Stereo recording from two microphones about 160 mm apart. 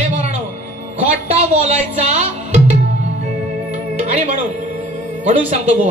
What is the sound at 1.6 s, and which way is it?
Speech, 45° right (ahead or behind).